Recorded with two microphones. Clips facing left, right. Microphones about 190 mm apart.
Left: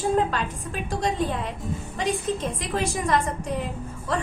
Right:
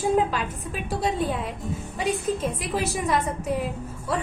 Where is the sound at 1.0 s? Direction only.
5° right (ahead or behind).